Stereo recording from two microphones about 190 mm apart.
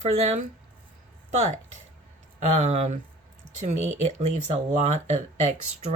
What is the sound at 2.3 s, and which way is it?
Speech, 40° right (ahead or behind).